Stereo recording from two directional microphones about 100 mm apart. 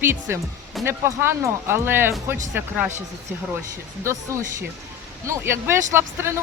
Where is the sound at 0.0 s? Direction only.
25° right (ahead or behind).